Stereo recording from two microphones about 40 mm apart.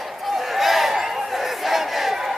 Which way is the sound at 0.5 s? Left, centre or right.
Centre.